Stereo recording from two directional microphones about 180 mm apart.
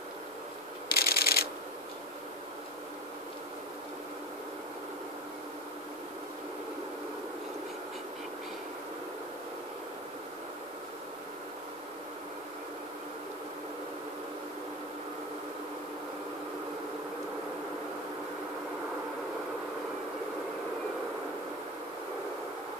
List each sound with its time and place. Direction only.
0.8 s pulleys: 60° left (ahead or behind)